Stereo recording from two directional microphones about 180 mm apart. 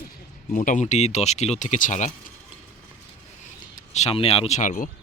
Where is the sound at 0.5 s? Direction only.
45° left (ahead or behind).